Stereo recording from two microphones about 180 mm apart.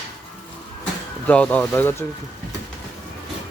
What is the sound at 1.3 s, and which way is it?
Speech, 5° left (ahead or behind).